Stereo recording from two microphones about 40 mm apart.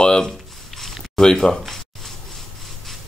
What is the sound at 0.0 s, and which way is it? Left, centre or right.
Speech, centre.